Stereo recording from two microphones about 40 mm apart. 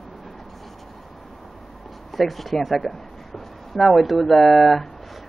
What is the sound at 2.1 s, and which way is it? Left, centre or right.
Speech, centre.